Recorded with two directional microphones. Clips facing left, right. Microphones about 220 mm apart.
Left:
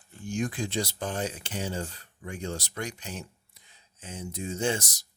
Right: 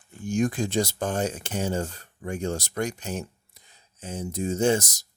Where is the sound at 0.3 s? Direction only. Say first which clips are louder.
Right 6 dB; 45° right (ahead or behind).